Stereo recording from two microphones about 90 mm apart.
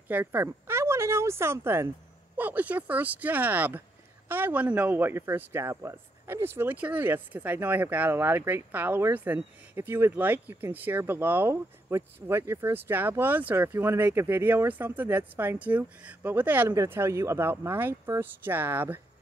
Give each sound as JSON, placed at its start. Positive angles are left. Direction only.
{"t": 0.1, "sound": "speech", "side_deg": -20}
{"t": 16.6, "sound": "speech", "side_deg": -35}